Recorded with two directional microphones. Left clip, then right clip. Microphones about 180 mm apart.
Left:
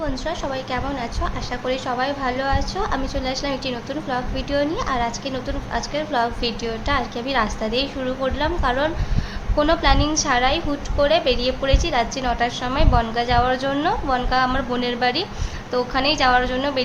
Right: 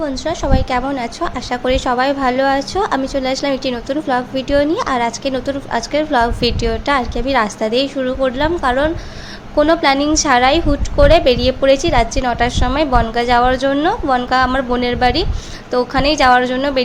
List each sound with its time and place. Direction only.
0.0 s a woman's voice: 35° right (ahead or behind)